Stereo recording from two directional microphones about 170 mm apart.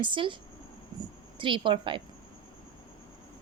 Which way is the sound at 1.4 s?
30° right (ahead or behind).